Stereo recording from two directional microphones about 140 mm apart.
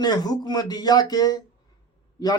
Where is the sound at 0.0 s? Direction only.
30° left (ahead or behind).